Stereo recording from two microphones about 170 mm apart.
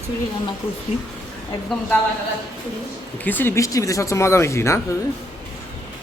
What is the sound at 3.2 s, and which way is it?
Speech, 10° left (ahead or behind).